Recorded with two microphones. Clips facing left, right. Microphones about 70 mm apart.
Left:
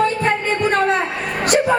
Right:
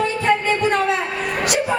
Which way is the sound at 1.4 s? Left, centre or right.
Left.